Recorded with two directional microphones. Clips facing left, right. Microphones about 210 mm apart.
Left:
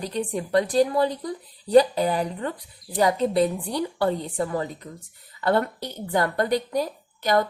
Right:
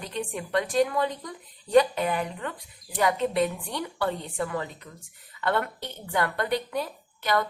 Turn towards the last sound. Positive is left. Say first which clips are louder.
# left 4 dB
turn(degrees=40)  # may be behind; listen again after turning